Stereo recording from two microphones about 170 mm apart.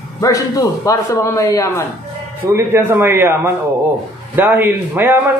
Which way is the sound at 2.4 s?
15° right (ahead or behind).